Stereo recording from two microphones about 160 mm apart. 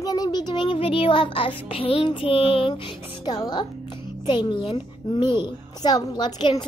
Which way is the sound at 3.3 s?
25° left (ahead or behind).